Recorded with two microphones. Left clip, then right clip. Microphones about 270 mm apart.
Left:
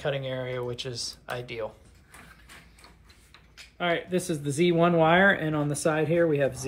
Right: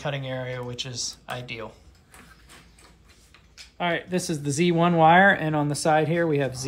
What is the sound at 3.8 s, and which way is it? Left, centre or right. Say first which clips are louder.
Speech: right 1 dB; right.